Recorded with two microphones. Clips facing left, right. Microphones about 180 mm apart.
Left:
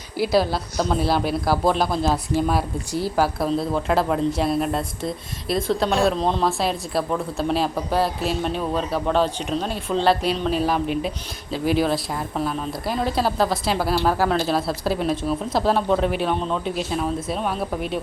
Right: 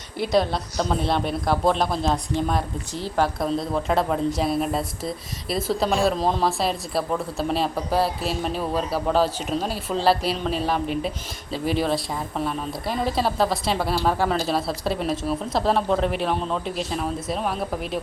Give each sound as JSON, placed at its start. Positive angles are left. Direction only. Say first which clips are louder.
{"t": 0.2, "sound": "speech", "louder": "left 2 dB", "side_deg": 5}